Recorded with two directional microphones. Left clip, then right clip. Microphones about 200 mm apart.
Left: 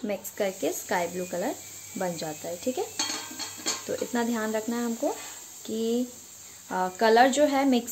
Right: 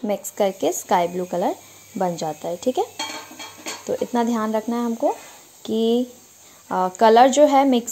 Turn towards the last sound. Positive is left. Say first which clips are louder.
# right 8 dB
turn(degrees=-25)  # may be behind; listen again after turning